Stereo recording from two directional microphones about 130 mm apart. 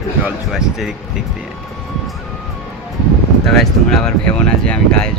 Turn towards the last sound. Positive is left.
turn(degrees=5)  # may be behind; listen again after turning